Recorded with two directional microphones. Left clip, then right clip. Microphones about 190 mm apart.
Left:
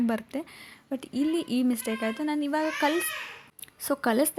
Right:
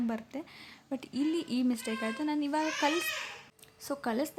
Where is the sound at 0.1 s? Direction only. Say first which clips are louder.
Left 7 dB; 25° left (ahead or behind).